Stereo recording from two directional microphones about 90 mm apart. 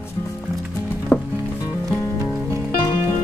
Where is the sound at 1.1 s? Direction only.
25° left (ahead or behind).